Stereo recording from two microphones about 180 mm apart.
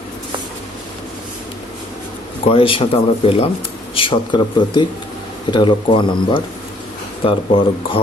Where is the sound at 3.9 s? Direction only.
25° left (ahead or behind).